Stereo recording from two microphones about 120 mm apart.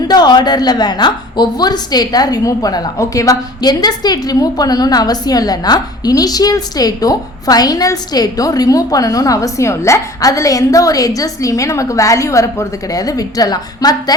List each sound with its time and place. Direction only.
0.1 s a woman's voice: 35° left (ahead or behind)